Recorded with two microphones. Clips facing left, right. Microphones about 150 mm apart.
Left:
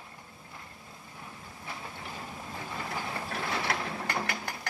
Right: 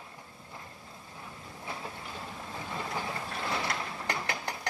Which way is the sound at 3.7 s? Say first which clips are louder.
Left 3 dB; 60° left (ahead or behind).